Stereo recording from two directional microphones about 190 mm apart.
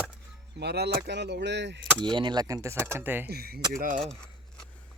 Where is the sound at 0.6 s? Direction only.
60° right (ahead or behind).